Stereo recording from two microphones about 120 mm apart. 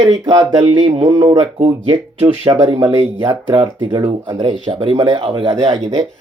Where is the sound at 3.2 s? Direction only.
40° right (ahead or behind).